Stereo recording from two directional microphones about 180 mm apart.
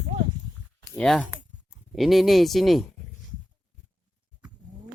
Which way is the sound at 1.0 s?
5° left (ahead or behind).